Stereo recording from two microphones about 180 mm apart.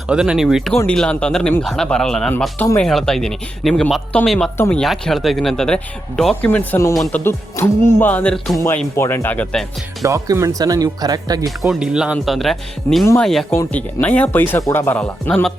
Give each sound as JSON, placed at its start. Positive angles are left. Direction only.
{"t": 0.1, "sound": "speech", "side_deg": -5}
{"t": 6.9, "sound": "speech", "side_deg": 0}
{"t": 7.3, "sound": "speech", "side_deg": 15}
{"t": 8.5, "sound": "speech", "side_deg": 15}
{"t": 10.0, "sound": "speech", "side_deg": -15}
{"t": 11.7, "sound": "speech", "side_deg": -5}